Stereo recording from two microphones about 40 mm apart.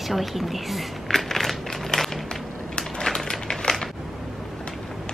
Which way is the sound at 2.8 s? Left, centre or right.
Centre.